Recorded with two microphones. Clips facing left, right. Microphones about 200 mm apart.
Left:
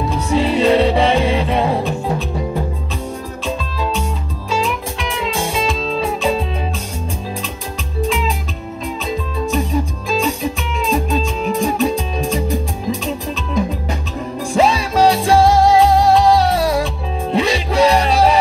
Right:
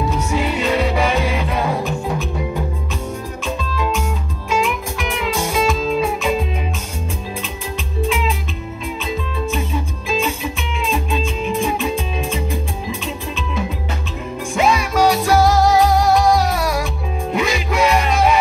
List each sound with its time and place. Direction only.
0.3 s music: 30° left (ahead or behind)
4.5 s music: 35° left (ahead or behind)
9.5 s music: 40° left (ahead or behind)
14.5 s music: 30° left (ahead or behind)